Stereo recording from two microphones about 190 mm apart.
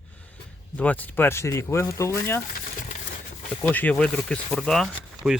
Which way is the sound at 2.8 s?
40° left (ahead or behind).